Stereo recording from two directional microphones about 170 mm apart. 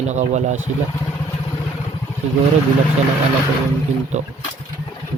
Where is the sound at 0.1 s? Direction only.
45° right (ahead or behind).